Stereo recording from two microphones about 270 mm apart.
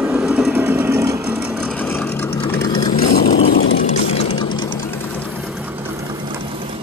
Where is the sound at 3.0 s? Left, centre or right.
Left.